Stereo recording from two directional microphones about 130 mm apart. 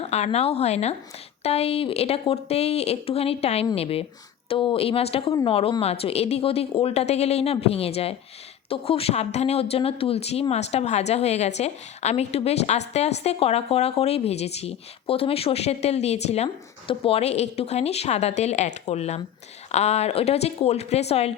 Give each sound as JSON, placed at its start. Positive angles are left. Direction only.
{"t": 0.1, "sound": "a woman's voice", "side_deg": 55}